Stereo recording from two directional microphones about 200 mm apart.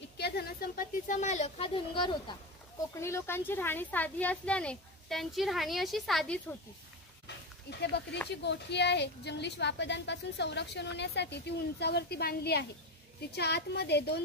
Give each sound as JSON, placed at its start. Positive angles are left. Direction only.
{"t": 0.2, "sound": "a woman's voice", "side_deg": 50}
{"t": 2.9, "sound": "speech", "side_deg": 15}
{"t": 7.8, "sound": "a woman's voice", "side_deg": 60}